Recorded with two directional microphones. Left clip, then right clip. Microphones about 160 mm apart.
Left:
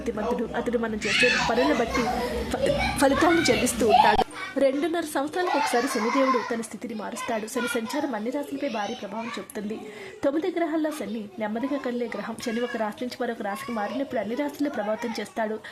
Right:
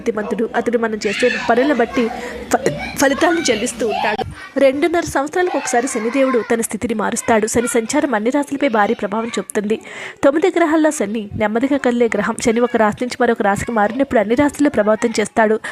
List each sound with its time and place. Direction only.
0.5 s speech: 30° right (ahead or behind)
3.0 s a woman's voice: 25° right (ahead or behind)
4.5 s speech: 40° right (ahead or behind)
6.5 s speech: 50° right (ahead or behind)